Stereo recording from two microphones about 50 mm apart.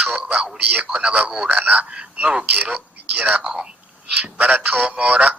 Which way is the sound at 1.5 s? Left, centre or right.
Right.